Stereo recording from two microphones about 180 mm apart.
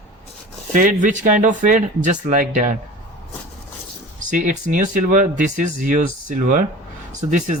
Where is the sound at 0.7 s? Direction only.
45° right (ahead or behind).